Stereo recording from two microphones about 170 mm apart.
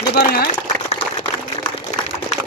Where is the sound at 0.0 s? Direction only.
70° left (ahead or behind).